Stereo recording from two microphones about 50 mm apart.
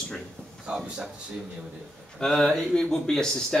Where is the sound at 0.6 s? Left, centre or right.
Centre.